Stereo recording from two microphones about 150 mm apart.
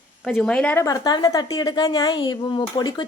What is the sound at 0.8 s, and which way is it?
Speech, 25° left (ahead or behind).